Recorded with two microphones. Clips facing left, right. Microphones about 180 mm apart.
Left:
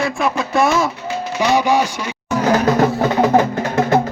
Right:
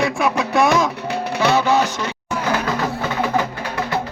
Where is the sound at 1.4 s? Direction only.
15° left (ahead or behind).